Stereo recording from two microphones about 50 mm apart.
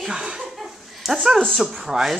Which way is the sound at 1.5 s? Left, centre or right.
Centre.